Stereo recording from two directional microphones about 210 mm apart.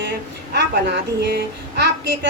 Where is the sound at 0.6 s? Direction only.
50° right (ahead or behind).